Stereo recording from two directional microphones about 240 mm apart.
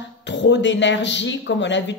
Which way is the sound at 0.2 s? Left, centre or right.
Left.